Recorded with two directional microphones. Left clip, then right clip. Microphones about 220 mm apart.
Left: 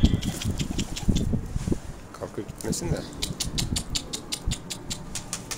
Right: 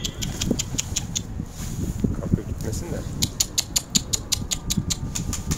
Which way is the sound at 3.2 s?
55° right (ahead or behind).